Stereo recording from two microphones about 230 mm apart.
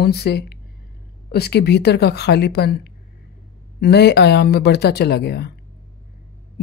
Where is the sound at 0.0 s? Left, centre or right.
Left.